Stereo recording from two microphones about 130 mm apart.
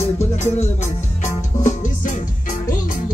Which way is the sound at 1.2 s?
70° left (ahead or behind).